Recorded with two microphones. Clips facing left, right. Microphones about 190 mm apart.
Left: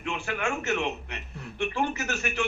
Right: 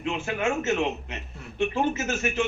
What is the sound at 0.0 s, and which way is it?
A man's voice, 20° right (ahead or behind).